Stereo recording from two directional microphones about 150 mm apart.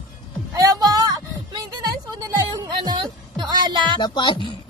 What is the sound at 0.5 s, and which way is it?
Music, 25° right (ahead or behind).